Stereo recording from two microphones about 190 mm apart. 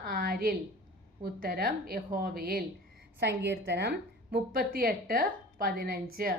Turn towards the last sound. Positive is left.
turn(degrees=-50)  # may be behind; listen again after turning